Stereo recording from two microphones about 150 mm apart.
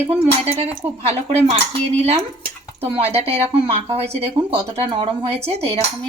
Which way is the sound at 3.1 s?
40° right (ahead or behind).